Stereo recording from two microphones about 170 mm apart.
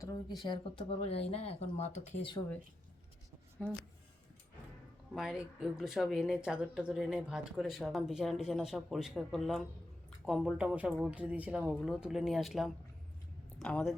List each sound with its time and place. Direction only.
0.4 s speech: 30° left (ahead or behind)
5.1 s speech: 5° right (ahead or behind)